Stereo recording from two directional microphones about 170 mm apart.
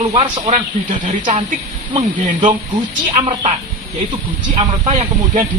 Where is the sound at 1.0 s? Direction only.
50° right (ahead or behind).